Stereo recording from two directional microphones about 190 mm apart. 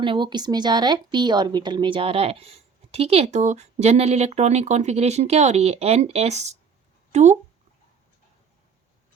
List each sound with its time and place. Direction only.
0.0 s speech: 25° right (ahead or behind)